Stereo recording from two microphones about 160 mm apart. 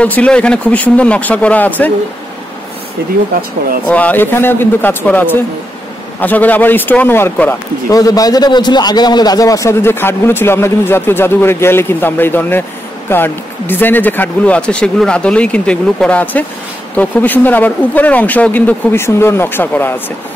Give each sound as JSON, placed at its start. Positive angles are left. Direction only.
{"t": 0.0, "sound": "a man's voice", "side_deg": 10}
{"t": 3.8, "sound": "a man's voice", "side_deg": 10}